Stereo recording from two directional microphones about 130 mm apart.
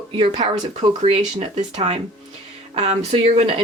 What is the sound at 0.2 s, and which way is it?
Speech, 50° right (ahead or behind).